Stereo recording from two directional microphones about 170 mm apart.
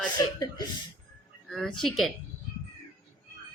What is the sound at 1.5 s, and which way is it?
Speech, 5° left (ahead or behind).